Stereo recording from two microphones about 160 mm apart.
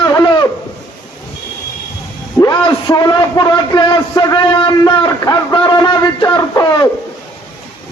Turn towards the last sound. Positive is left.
turn(degrees=25)  # may be behind; listen again after turning